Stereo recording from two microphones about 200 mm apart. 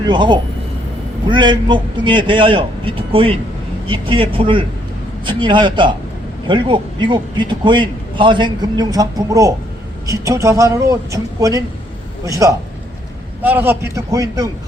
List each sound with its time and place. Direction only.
0.1 s a man's voice: 20° right (ahead or behind)